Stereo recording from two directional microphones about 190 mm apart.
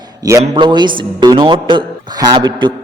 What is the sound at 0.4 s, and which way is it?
A man's voice, 25° right (ahead or behind).